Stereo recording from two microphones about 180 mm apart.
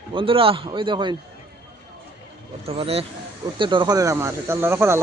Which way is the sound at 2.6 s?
35° right (ahead or behind).